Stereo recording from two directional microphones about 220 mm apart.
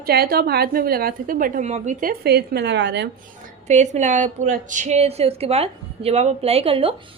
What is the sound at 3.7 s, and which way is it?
A woman's voice, 30° right (ahead or behind).